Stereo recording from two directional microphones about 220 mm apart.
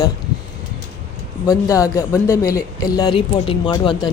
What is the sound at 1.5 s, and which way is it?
Speech, 15° left (ahead or behind).